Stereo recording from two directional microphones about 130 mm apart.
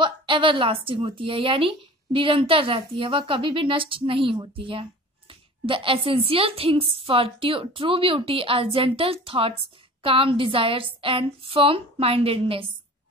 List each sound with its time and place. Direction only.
0.0 s a woman's voice: 40° right (ahead or behind)